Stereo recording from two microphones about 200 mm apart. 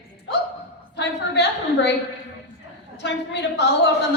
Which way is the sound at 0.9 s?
60° left (ahead or behind).